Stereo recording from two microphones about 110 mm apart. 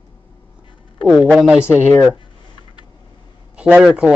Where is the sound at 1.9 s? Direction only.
20° left (ahead or behind).